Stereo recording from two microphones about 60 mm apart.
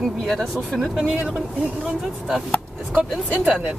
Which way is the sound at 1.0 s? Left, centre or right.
Centre.